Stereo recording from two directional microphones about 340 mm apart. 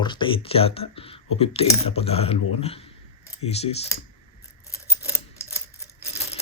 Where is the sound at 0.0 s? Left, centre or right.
Centre.